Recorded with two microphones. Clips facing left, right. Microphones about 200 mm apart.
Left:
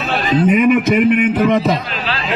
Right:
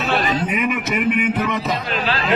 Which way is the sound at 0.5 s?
45° left (ahead or behind).